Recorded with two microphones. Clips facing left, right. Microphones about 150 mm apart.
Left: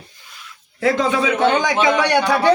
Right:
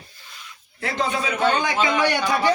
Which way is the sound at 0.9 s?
90° left.